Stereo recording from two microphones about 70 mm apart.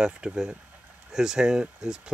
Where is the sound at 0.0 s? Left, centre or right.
Centre.